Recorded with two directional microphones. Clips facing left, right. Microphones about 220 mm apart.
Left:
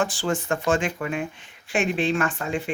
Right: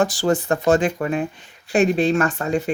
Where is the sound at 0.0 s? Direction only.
40° right (ahead or behind).